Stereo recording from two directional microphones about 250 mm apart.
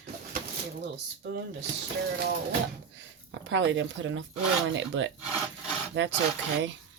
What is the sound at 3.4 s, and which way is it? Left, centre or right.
Speech, right.